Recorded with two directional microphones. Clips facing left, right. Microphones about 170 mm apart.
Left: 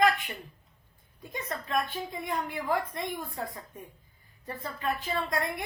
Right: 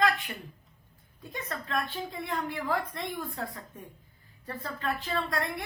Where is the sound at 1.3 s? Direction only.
20° left (ahead or behind).